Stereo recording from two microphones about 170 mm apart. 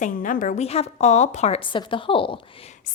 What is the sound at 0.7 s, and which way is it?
Speech, 35° left (ahead or behind).